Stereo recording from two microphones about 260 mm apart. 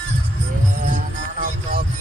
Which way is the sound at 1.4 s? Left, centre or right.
Right.